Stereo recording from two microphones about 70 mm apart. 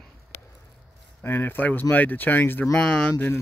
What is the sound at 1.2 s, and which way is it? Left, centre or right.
Speech, left.